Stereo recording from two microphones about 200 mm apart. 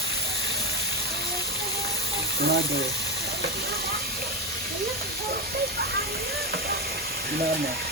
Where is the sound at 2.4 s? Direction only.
55° right (ahead or behind).